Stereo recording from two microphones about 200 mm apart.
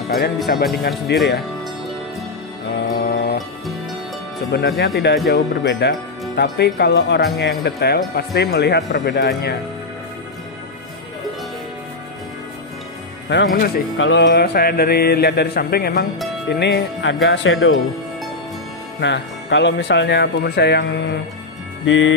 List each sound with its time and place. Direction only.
0.5 s music: 50° left (ahead or behind)
1.1 s speech: 55° left (ahead or behind)
2.7 s music: 55° left (ahead or behind)
4.5 s speech: 55° left (ahead or behind)
13.3 s music: 60° left (ahead or behind)
16.4 s speech: 55° left (ahead or behind); by 17.7 s 70° left (ahead or behind)
18.9 s speech: 60° left (ahead or behind)
21.8 s music: 70° left (ahead or behind)